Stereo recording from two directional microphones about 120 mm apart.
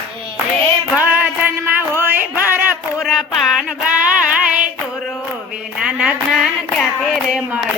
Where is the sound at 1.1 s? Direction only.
15° right (ahead or behind).